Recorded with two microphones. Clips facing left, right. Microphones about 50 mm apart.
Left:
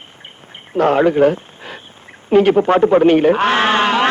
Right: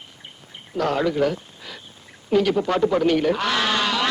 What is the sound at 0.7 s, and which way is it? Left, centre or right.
Speech, left.